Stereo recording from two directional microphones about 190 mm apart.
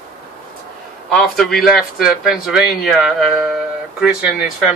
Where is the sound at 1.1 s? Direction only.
Centre (ahead or behind).